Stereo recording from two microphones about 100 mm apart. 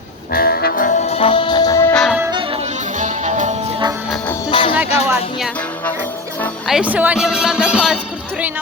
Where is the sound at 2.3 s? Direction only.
60° right (ahead or behind); by 2.7 s 80° right.